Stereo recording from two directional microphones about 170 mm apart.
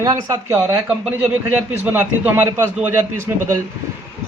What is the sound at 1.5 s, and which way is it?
A man's voice, 10° right (ahead or behind).